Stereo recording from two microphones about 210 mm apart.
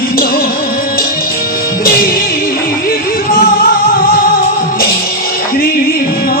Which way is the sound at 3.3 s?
45° left (ahead or behind).